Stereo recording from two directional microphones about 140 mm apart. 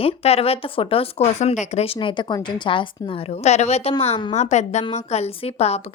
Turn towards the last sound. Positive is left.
turn(degrees=50)  # may be behind; listen again after turning